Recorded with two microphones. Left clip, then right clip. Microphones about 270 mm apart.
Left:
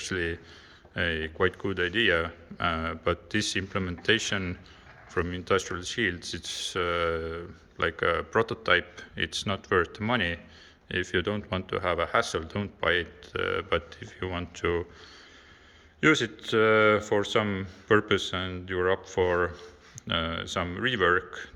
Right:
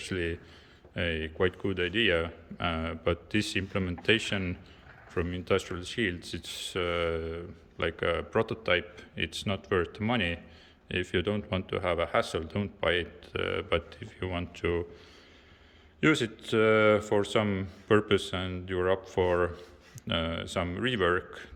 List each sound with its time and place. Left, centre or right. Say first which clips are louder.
0.0 s speech: left 3 dB; centre
16.0 s speech: left 3 dB; centre